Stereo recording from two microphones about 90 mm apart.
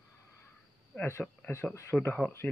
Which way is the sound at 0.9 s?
25° left (ahead or behind).